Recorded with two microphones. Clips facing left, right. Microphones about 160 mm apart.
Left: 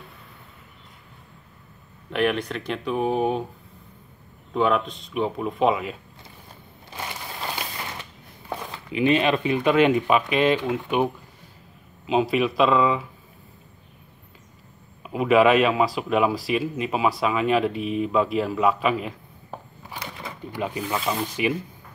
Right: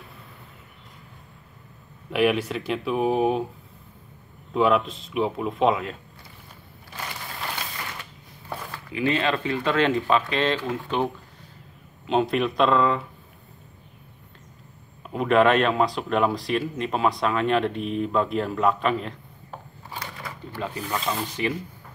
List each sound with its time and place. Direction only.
2.0 s speech: 5° right (ahead or behind)
4.6 s speech: centre (ahead or behind)
8.5 s speech: 20° left (ahead or behind)
12.1 s speech: 5° left (ahead or behind)
15.0 s speech: 5° left (ahead or behind)
20.2 s speech: 15° left (ahead or behind)